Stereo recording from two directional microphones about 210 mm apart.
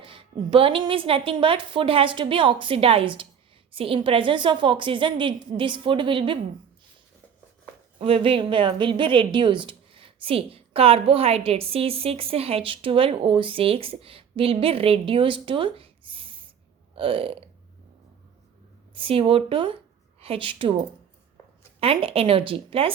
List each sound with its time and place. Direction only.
0.0 s a woman's voice: 25° right (ahead or behind)
7.9 s a woman's voice: 25° right (ahead or behind)
18.9 s a woman's voice: 25° right (ahead or behind)
21.8 s a woman's voice: 25° right (ahead or behind)